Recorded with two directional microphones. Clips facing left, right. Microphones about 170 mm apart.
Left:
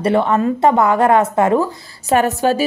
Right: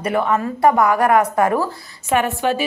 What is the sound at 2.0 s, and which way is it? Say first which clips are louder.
Speech: left 4 dB; 40° left (ahead or behind).